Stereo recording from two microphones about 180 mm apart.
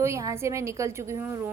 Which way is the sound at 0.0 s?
15° right (ahead or behind).